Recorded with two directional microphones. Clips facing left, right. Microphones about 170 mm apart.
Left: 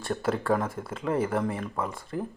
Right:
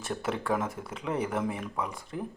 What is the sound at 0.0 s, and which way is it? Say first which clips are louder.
Speech: left 4 dB; centre (ahead or behind).